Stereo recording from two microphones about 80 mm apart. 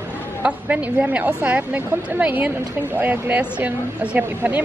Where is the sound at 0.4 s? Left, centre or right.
Centre.